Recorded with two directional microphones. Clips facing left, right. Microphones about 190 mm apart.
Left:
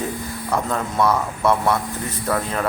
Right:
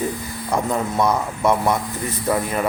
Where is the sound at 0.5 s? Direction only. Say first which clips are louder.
Right 2 dB; 15° right (ahead or behind).